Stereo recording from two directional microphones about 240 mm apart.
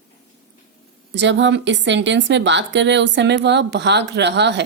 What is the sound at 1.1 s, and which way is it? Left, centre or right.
Speech, right.